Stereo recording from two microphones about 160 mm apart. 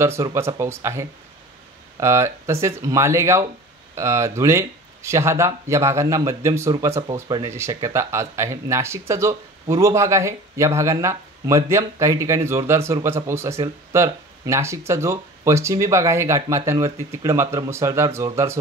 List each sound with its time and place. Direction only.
0.0 s speech: 15° right (ahead or behind)